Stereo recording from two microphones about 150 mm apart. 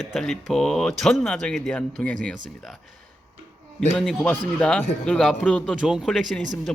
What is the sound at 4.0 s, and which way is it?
Mantra, 5° left (ahead or behind).